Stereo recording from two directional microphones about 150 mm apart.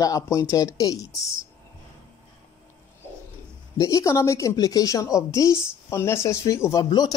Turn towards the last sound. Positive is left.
turn(degrees=25)  # may be behind; listen again after turning